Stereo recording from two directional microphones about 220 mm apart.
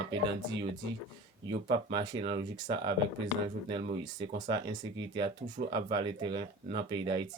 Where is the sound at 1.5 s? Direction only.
20° right (ahead or behind).